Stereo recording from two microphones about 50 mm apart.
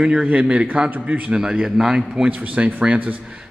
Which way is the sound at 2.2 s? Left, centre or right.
Right.